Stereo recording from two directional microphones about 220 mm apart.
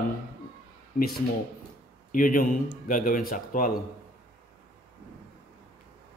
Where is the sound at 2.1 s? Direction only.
40° left (ahead or behind).